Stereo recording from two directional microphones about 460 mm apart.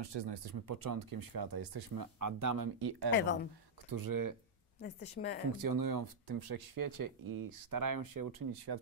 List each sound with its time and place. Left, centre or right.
0.0 s speech: right
3.2 s a woman's voice: left
3.9 s speech: right
4.7 s a woman's voice: centre
5.6 s speech: right